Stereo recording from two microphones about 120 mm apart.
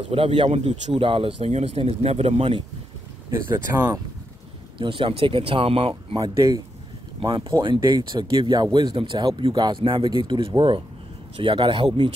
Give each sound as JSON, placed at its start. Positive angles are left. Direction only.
{"t": 0.1, "sound": "speech", "side_deg": -50}
{"t": 0.5, "sound": "speech", "side_deg": -65}
{"t": 3.3, "sound": "speech", "side_deg": -20}
{"t": 4.7, "sound": "speech", "side_deg": -45}
{"t": 8.9, "sound": "speech", "side_deg": -45}